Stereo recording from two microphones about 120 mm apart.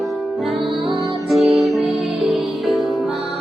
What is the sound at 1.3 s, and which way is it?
Music, centre (ahead or behind).